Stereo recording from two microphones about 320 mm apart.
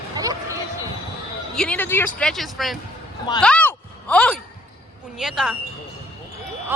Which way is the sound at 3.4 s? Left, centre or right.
Centre.